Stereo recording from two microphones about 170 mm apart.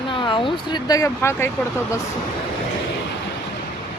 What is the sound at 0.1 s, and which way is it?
Speech, 30° left (ahead or behind).